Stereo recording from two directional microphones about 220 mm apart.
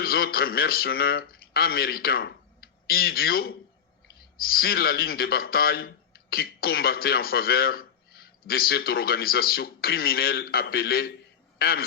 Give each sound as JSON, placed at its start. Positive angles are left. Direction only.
{"t": 0.0, "sound": "speech", "side_deg": 45}